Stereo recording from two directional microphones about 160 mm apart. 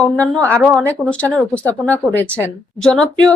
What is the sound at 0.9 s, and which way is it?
Speech, 10° left (ahead or behind).